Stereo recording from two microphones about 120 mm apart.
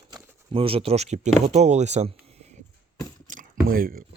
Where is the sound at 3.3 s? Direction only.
90° right.